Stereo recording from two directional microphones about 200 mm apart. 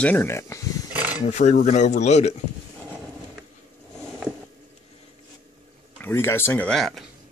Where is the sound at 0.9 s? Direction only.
10° right (ahead or behind).